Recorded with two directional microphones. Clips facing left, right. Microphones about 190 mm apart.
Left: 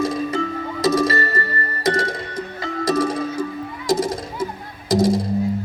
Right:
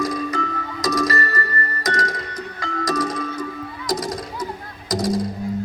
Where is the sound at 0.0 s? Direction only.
25° left (ahead or behind).